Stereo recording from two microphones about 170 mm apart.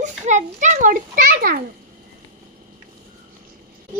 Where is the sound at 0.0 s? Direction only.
45° right (ahead or behind); by 1.6 s 60° right (ahead or behind).